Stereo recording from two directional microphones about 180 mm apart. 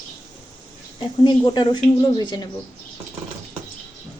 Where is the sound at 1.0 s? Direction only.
25° left (ahead or behind).